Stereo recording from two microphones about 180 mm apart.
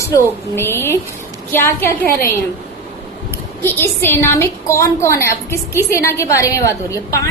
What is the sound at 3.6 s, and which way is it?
A woman's voice, 10° left (ahead or behind).